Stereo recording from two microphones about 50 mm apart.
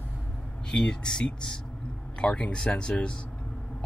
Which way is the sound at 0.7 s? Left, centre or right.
Centre.